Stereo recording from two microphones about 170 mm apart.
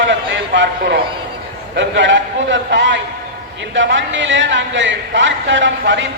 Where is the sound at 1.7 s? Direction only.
90° right.